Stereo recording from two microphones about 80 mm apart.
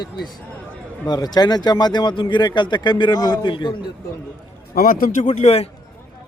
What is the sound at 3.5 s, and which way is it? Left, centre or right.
Speech, left.